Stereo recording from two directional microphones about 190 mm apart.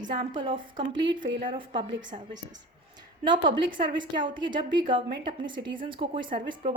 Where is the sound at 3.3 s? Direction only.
25° right (ahead or behind).